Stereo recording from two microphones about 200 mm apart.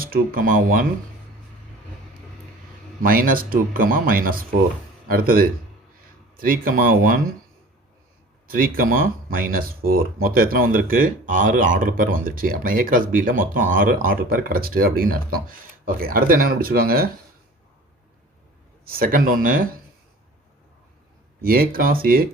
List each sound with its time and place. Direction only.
0.0 s speech: 45° right (ahead or behind)
3.0 s speech: 45° right (ahead or behind)
8.4 s speech: 45° right (ahead or behind)
18.9 s speech: 45° right (ahead or behind)
21.4 s speech: 45° right (ahead or behind)